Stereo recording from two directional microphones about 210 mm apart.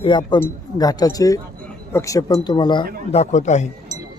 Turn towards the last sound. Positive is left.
turn(degrees=35)  # may be behind; listen again after turning